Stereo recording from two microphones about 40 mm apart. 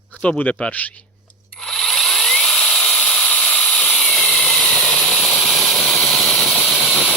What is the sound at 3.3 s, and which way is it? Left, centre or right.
Steam, left.